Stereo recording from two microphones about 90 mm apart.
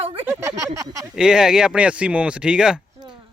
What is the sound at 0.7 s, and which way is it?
Speech, 40° right (ahead or behind).